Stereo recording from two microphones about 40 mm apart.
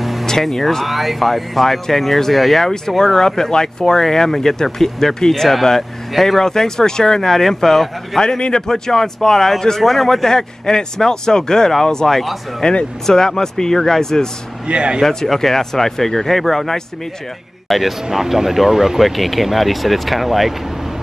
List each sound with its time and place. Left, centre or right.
0.0 s vehicle: centre
0.3 s speech: centre
0.8 s speech: centre
8.2 s a man's voice: centre
12.2 s speech: centre
13.0 s speech: centre
14.7 s speech: right
15.2 s speech: centre